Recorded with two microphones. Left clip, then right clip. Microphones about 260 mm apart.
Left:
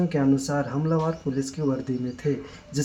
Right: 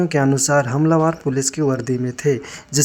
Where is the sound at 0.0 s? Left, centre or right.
Right.